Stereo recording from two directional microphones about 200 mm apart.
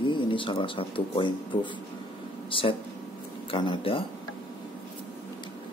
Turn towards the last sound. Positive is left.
turn(degrees=25)  # may be behind; listen again after turning